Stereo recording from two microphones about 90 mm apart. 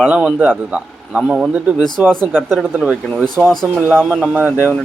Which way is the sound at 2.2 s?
20° right (ahead or behind).